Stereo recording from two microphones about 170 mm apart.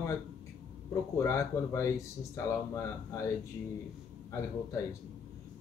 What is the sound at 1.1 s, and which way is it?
Speech, 20° left (ahead or behind).